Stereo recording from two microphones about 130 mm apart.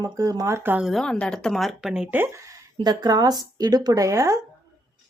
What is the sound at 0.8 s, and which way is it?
Speech, 5° left (ahead or behind).